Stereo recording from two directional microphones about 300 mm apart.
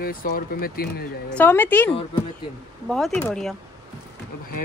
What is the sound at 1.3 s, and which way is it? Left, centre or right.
A woman's voice, centre.